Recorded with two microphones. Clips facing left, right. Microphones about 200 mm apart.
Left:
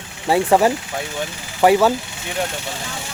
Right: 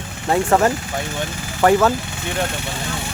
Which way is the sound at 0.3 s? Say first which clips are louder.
Left 1 dB; 10° left (ahead or behind).